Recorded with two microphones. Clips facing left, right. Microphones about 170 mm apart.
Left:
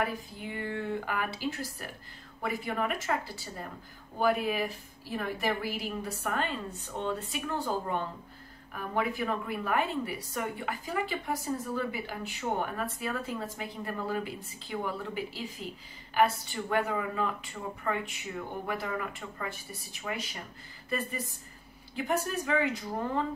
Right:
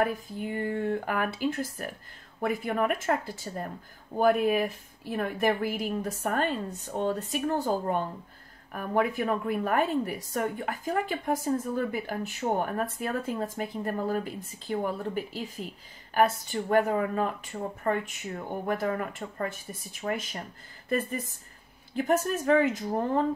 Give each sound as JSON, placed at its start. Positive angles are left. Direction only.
{"t": 0.0, "sound": "a woman's voice", "side_deg": -50}